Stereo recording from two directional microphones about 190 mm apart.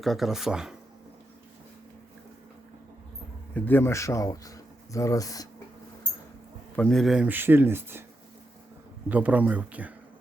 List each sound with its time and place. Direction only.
0.0 s speech: centre (ahead or behind)
3.5 s speech: 10° left (ahead or behind)
6.7 s speech: 5° left (ahead or behind)
9.0 s speech: 10° right (ahead or behind)